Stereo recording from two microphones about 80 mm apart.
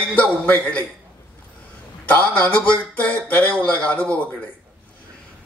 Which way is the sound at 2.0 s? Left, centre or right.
Centre.